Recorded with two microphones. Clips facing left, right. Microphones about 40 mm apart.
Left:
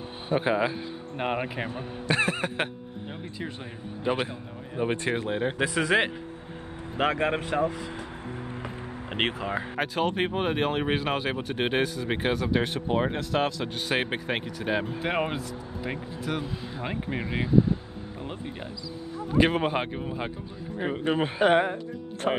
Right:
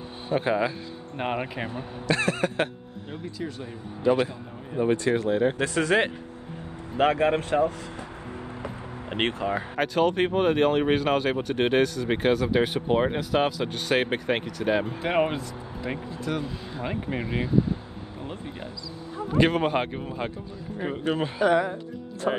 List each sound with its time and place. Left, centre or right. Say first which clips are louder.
0.3 s speech: even; centre
1.8 s music: even; centre
4.0 s speech: right 5 dB; centre
5.6 s speech: right 1 dB; centre
21.0 s speech: left 1 dB; left
21.4 s speech: even; left